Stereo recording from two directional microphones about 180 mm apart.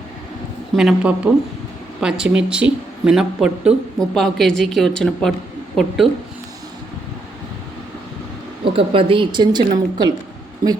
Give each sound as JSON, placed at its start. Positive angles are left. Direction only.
{"t": 0.8, "sound": "speech", "side_deg": -5}
{"t": 8.6, "sound": "a woman's voice", "side_deg": -30}